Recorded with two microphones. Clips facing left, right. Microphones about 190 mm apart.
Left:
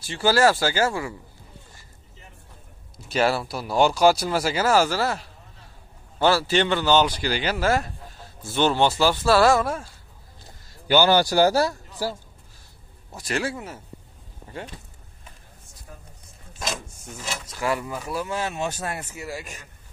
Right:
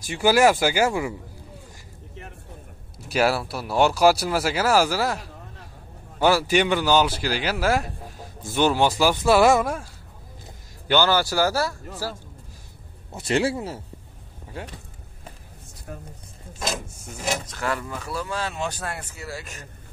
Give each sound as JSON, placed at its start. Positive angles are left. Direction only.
{"t": 0.0, "sound": "speech", "side_deg": -15}
{"t": 3.1, "sound": "speech", "side_deg": -5}
{"t": 11.1, "sound": "speech", "side_deg": 20}
{"t": 13.1, "sound": "speech", "side_deg": -25}
{"t": 15.9, "sound": "a sound", "side_deg": -65}
{"t": 17.5, "sound": "speech", "side_deg": 10}